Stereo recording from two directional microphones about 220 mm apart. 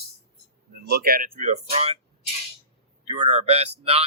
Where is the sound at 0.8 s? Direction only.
45° right (ahead or behind); by 1.9 s 30° right (ahead or behind).